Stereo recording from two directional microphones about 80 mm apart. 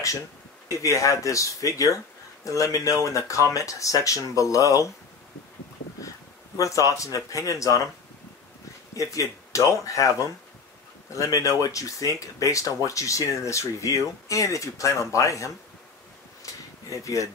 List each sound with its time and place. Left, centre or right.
0.7 s speech: left
5.9 s speech: left
8.9 s speech: left
16.4 s a sound: left
17.0 s speech: left